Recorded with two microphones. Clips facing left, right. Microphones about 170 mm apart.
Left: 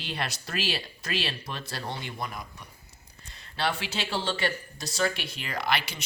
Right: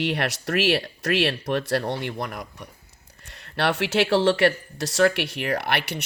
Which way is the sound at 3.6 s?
75° right (ahead or behind).